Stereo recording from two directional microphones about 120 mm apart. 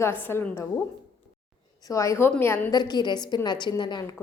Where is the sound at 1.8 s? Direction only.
25° left (ahead or behind).